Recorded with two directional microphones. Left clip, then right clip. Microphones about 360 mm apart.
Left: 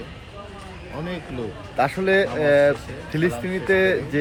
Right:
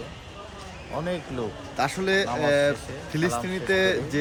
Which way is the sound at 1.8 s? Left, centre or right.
Centre.